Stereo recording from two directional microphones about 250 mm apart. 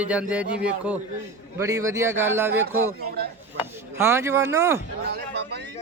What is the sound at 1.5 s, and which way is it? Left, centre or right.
Speech, centre.